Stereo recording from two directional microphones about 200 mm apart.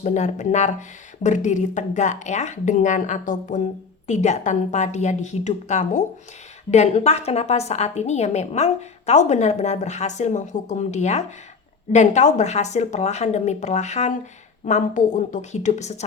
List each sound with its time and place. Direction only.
0.0 s speech: 35° left (ahead or behind)